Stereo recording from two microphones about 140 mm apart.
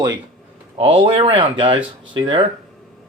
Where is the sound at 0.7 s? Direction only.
40° right (ahead or behind).